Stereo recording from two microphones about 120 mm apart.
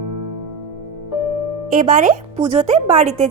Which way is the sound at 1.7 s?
90° right.